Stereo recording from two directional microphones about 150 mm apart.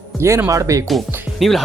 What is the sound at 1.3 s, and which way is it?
Speech, centre (ahead or behind).